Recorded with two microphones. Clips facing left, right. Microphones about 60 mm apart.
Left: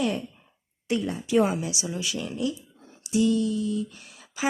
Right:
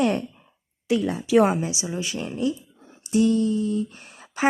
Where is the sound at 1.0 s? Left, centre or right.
Right.